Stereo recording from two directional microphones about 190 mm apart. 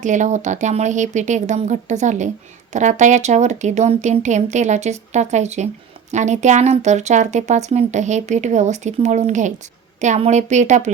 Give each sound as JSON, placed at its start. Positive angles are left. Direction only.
{"t": 0.0, "sound": "speech", "side_deg": -40}